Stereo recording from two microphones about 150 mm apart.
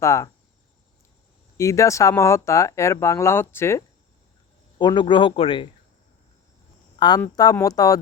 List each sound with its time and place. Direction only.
0.0 s speech: 20° left (ahead or behind)
1.5 s speech: 20° left (ahead or behind)
4.8 s speech: 30° left (ahead or behind)
7.0 s speech: 30° left (ahead or behind)